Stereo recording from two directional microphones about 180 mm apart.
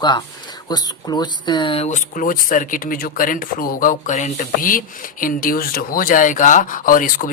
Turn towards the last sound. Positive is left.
turn(degrees=50)  # may be behind; listen again after turning